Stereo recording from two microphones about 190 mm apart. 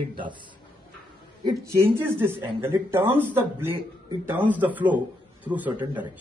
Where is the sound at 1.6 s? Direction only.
15° right (ahead or behind).